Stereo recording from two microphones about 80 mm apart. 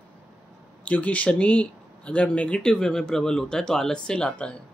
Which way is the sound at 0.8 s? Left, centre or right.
Centre.